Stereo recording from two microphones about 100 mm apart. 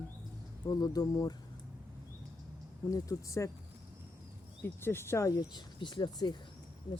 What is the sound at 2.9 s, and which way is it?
Speech, 35° left (ahead or behind).